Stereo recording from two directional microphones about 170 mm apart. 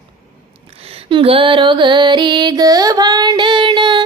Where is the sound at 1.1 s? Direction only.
30° right (ahead or behind).